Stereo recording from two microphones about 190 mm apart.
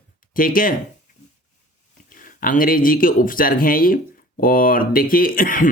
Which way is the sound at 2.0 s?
45° left (ahead or behind).